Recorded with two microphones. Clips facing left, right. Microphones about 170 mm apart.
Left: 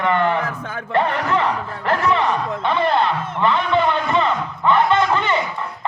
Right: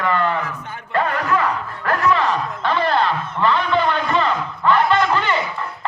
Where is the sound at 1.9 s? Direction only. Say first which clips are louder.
Even; 25° left (ahead or behind).